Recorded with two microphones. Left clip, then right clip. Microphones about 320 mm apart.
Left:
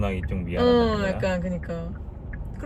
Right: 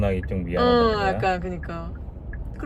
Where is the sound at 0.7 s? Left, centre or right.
Centre.